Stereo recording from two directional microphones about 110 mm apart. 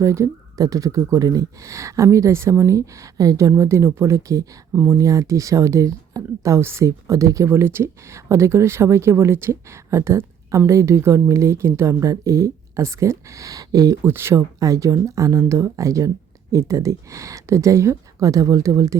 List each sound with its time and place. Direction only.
0.0 s speech: 30° right (ahead or behind)
4.7 s speech: 15° right (ahead or behind)
4.9 s speech: 30° right (ahead or behind)